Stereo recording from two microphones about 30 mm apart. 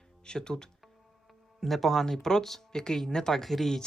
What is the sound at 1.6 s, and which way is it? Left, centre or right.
Speech, centre.